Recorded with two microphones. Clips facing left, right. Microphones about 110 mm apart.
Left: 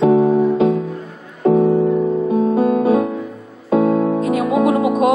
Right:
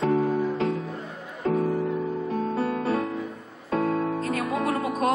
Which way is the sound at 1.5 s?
20° left (ahead or behind).